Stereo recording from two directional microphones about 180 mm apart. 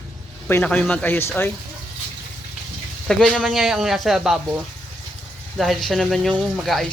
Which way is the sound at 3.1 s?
Centre (ahead or behind).